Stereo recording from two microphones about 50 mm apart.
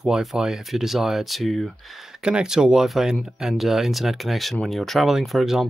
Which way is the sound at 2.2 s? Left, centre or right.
Centre.